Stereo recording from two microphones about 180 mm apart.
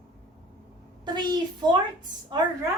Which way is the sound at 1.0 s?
25° right (ahead or behind).